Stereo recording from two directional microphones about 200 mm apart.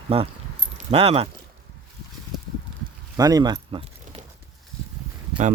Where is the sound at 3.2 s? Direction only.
20° right (ahead or behind).